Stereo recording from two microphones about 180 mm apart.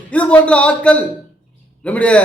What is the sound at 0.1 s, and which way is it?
A man's voice, 5° left (ahead or behind).